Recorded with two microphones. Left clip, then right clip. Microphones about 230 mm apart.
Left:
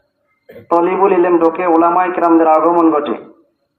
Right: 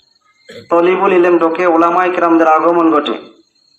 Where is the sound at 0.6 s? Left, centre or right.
Left.